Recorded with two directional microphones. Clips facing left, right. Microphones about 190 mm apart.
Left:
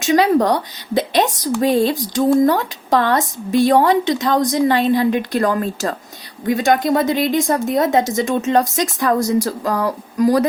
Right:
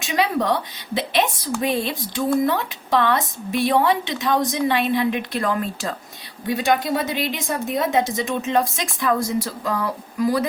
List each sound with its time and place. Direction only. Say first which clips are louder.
0.0 s a woman's voice: left 7 dB; 45° left (ahead or behind)